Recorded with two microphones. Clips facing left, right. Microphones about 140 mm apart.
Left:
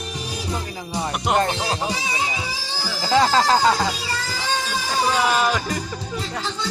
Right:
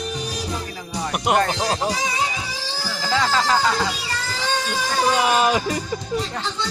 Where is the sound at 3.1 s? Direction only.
35° left (ahead or behind).